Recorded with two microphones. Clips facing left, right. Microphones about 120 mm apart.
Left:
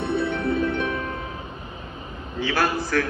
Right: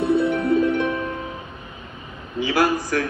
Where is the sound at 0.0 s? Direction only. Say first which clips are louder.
Right 5 dB; 20° right (ahead or behind).